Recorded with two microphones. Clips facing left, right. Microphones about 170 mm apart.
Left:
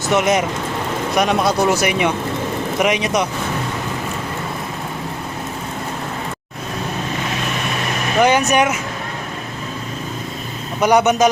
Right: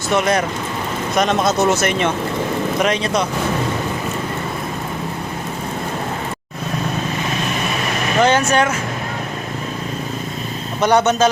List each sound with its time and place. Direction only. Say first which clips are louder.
0.1 s speech: left 1 dB; 20° left (ahead or behind)
1.7 s a man's voice: even; 10° left (ahead or behind)
8.2 s a man's voice: left 1 dB; 15° left (ahead or behind)
10.8 s a man's voice: left 1 dB; 10° left (ahead or behind)